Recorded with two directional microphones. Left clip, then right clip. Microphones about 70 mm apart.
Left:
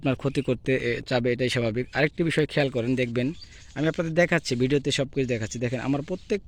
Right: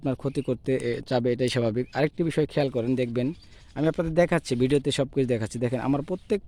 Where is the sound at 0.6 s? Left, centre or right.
Right.